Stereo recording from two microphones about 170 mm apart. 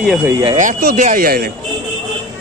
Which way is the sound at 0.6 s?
55° right (ahead or behind).